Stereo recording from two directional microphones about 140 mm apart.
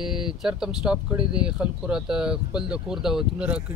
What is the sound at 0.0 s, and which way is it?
Speech, 5° right (ahead or behind).